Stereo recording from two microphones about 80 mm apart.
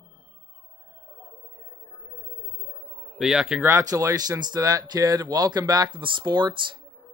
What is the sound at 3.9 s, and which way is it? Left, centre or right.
Speech, right.